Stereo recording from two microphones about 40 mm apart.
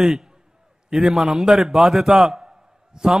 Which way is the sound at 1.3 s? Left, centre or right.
Centre.